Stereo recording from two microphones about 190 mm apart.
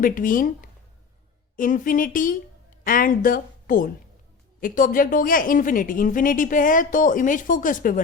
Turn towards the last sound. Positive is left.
turn(degrees=45)  # may be behind; listen again after turning